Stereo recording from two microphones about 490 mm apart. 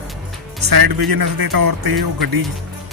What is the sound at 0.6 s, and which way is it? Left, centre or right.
Speech, right.